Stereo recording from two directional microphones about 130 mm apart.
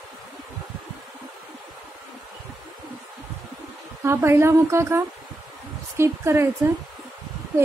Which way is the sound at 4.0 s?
20° right (ahead or behind).